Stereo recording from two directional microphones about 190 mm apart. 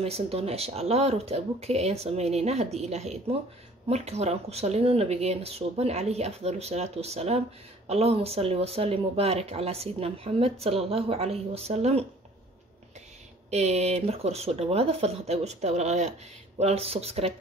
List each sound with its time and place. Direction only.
0.0 s speech: 30° right (ahead or behind)
13.5 s speech: 35° right (ahead or behind)